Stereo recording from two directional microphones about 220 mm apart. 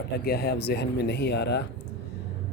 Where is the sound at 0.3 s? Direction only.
45° left (ahead or behind).